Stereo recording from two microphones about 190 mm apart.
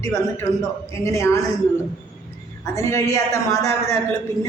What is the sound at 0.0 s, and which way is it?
A man's voice, 15° left (ahead or behind).